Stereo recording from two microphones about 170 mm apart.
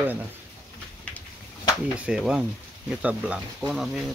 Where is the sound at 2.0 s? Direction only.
5° right (ahead or behind).